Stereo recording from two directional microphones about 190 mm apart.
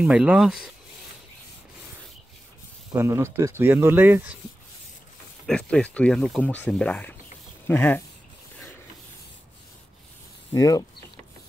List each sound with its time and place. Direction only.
0.0 s speech: 5° right (ahead or behind)
2.9 s speech: 15° right (ahead or behind)
5.5 s speech: 5° left (ahead or behind)
10.5 s speech: 20° left (ahead or behind)